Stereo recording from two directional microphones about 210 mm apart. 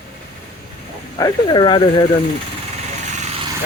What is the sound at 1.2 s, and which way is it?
Speech, 25° left (ahead or behind).